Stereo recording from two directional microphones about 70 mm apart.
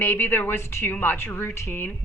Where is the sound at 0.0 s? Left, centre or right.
Left.